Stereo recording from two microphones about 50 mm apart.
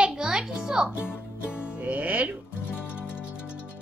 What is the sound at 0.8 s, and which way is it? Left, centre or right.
Speech, right.